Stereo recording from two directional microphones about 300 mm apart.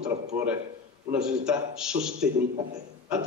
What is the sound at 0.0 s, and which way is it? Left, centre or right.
A man's voice, centre.